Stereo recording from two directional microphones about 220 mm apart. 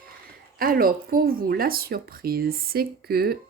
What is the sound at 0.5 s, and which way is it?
Speech, 40° right (ahead or behind).